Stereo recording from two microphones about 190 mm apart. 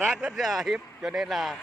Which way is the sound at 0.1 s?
Centre (ahead or behind).